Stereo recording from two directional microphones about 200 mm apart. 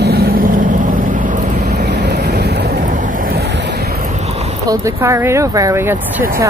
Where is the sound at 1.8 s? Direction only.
55° right (ahead or behind).